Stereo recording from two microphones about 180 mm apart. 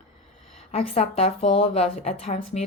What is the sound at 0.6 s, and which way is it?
A woman's voice, 35° left (ahead or behind).